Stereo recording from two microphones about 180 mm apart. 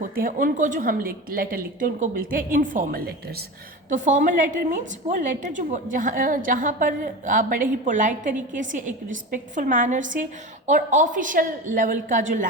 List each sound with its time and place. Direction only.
0.0 s a woman's voice: 50° right (ahead or behind)
3.8 s a woman's voice: 45° right (ahead or behind)